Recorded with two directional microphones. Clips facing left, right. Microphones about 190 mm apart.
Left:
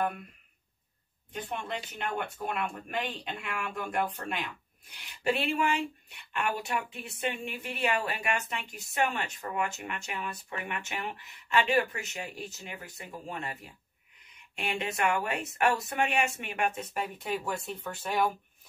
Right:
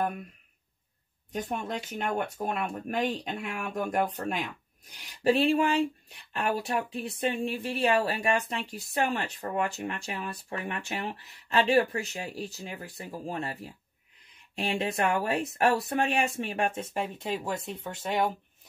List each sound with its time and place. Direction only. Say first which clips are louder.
1.3 s speech: right 4 dB; 40° right (ahead or behind); by 18.3 s 20° right (ahead or behind)